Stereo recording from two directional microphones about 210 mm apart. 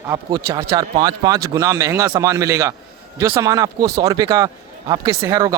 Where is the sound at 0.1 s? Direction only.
20° right (ahead or behind).